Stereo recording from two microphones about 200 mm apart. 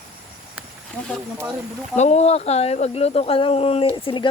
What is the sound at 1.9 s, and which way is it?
Speech, 35° left (ahead or behind).